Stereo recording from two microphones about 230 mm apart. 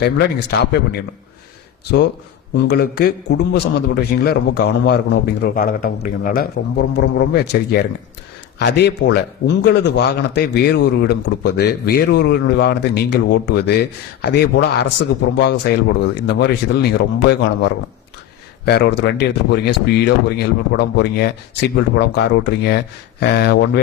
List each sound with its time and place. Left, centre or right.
0.0 s a man's voice: left
2.6 s a man's voice: left